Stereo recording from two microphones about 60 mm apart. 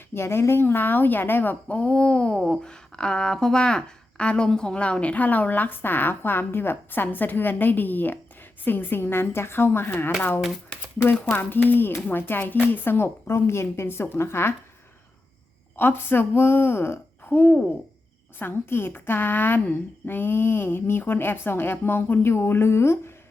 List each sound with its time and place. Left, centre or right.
0.1 s speech: left
1.6 s speech: centre; by 14.5 s left
15.7 s speech: left